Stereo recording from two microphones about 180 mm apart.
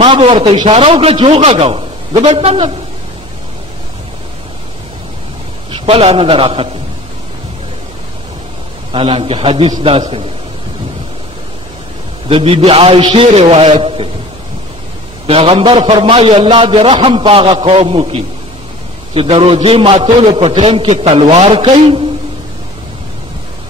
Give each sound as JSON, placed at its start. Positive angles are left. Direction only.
{"t": 0.0, "sound": "a man's voice", "side_deg": -30}
{"t": 5.7, "sound": "a man's voice", "side_deg": -35}
{"t": 8.9, "sound": "a man's voice", "side_deg": -30}
{"t": 12.3, "sound": "a man's voice", "side_deg": -30}
{"t": 15.2, "sound": "a man's voice", "side_deg": -30}